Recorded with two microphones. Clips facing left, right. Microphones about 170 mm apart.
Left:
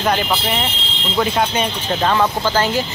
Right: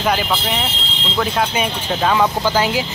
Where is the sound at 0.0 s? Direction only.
Centre (ahead or behind).